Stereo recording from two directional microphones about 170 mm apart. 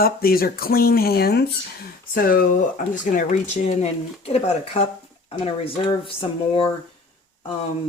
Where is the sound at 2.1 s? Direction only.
55° left (ahead or behind); by 6.7 s 30° left (ahead or behind).